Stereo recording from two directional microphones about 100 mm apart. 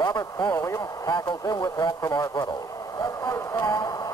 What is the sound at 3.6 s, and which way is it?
Speech, 40° left (ahead or behind).